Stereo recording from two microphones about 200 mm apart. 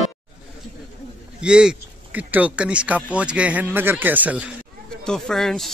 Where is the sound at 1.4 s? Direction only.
5° right (ahead or behind).